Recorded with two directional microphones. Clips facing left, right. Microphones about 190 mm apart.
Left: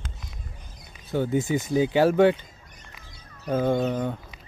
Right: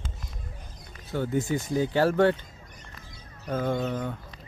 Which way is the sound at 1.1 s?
20° left (ahead or behind).